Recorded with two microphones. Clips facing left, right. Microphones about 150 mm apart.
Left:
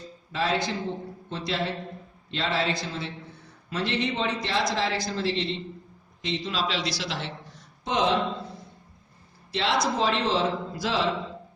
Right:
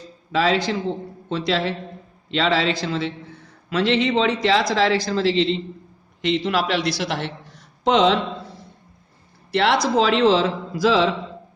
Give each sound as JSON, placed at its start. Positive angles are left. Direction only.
{"t": 0.3, "sound": "a woman's voice", "side_deg": -90}
{"t": 6.2, "sound": "a man's voice", "side_deg": -70}
{"t": 9.5, "sound": "speech", "side_deg": -65}
{"t": 9.8, "sound": "a woman's voice", "side_deg": -90}